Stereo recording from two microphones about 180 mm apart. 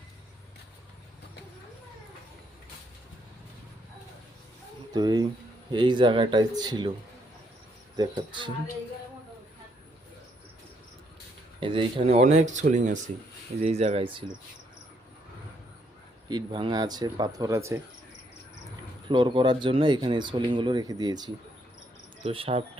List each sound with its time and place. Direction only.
4.9 s speech: 25° right (ahead or behind)
7.9 s speech: 25° right (ahead or behind)
11.6 s speech: 30° right (ahead or behind)
16.3 s speech: 25° right (ahead or behind)
19.0 s speech: 25° right (ahead or behind)